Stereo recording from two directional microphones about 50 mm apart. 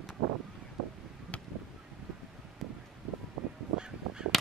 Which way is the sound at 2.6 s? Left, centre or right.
Centre.